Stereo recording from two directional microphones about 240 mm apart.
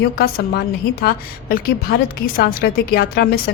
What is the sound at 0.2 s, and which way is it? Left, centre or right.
A woman's voice, left.